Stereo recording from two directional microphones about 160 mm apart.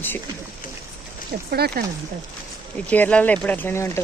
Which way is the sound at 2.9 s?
10° left (ahead or behind).